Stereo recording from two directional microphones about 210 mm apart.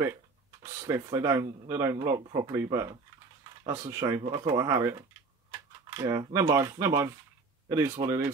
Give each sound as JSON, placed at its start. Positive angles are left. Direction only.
{"t": 0.8, "sound": "speech", "side_deg": -15}